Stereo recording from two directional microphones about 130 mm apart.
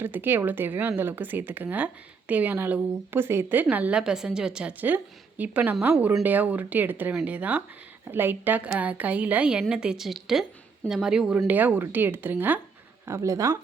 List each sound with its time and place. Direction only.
0.0 s speech: 15° right (ahead or behind)